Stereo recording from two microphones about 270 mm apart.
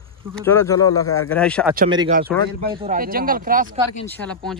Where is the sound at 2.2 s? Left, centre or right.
Centre.